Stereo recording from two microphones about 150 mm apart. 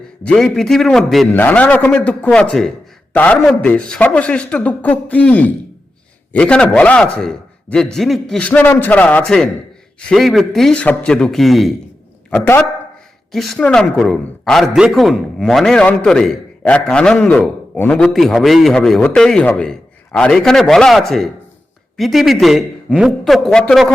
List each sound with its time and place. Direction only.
0.3 s a man's voice: 5° left (ahead or behind)
1.3 s a man's voice: 15° left (ahead or behind)
12.3 s a man's voice: 15° left (ahead or behind)
13.3 s a man's voice: 5° left (ahead or behind)